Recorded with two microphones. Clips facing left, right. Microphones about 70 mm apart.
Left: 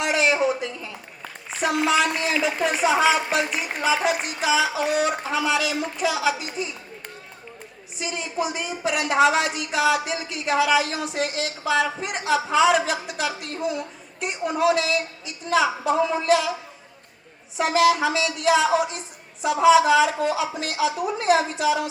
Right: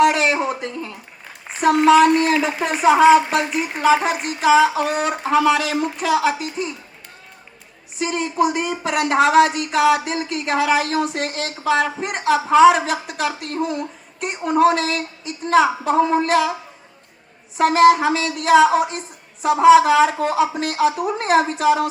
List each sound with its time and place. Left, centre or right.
0.0 s a sound: right
1.6 s speech: right
7.9 s speech: right
17.6 s speech: right